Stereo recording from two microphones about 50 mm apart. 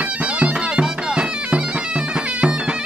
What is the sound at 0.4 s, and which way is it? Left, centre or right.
Bagpipes, right.